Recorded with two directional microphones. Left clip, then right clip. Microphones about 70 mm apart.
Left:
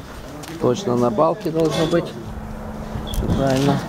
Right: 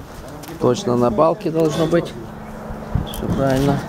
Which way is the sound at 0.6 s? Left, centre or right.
Centre.